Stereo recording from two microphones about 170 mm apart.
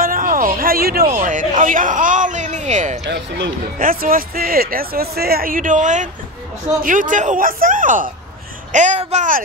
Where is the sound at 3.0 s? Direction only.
90° right.